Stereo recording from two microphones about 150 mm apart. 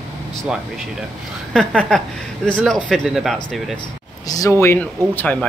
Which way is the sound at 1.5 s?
5° left (ahead or behind).